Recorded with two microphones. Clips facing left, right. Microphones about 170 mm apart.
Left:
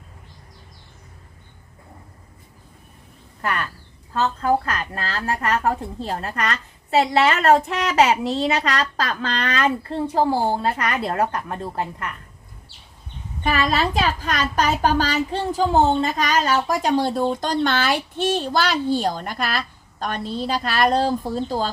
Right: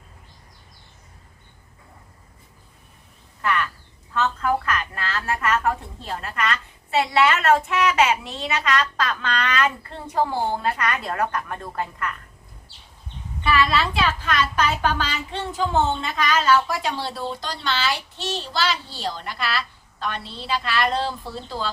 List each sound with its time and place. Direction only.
3.4 s a woman's voice: 40° left (ahead or behind)
13.4 s a child's voice: 45° left (ahead or behind)